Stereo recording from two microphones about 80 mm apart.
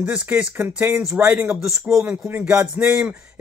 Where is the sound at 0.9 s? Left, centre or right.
Centre.